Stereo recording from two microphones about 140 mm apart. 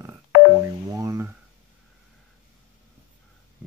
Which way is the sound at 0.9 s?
20° right (ahead or behind).